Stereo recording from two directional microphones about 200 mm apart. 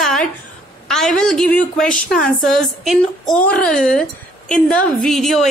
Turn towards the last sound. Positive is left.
turn(degrees=0)  # may be behind; listen again after turning